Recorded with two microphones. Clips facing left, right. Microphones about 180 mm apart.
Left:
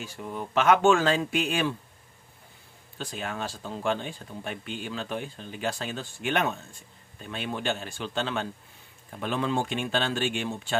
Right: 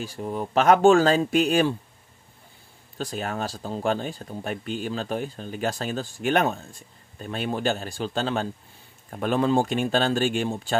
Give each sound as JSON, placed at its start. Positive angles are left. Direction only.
{"t": 0.0, "sound": "speech", "side_deg": -35}
{"t": 3.0, "sound": "speech", "side_deg": -40}